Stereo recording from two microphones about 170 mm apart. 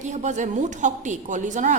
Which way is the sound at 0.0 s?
45° right (ahead or behind).